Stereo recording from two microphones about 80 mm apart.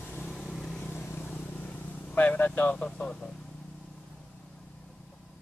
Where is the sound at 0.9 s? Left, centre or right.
Left.